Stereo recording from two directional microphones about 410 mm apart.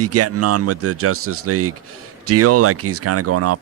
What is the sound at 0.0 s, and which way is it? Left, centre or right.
Speech, right.